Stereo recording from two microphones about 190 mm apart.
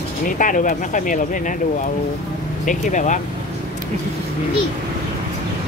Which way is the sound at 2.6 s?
40° left (ahead or behind).